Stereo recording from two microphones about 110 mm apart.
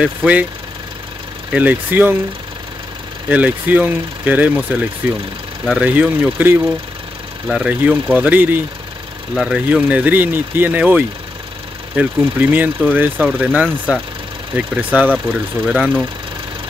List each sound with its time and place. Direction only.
0.0 s speech: 10° right (ahead or behind)
1.5 s speech: 15° right (ahead or behind)
3.3 s speech: 15° right (ahead or behind)